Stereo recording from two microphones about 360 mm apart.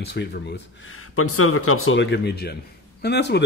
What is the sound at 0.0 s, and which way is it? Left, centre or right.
Speech, left.